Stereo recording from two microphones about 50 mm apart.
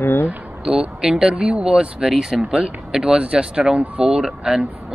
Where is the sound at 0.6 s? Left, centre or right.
Centre.